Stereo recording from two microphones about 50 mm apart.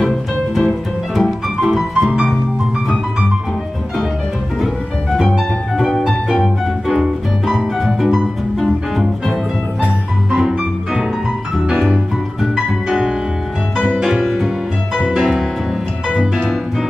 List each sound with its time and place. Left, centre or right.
1.1 s music: centre
5.2 s music: centre
5.9 s music: centre
6.9 s music: centre
12.5 s music: centre
14.0 s music: centre